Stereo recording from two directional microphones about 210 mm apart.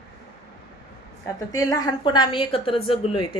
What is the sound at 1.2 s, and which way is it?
A woman's voice, 15° left (ahead or behind).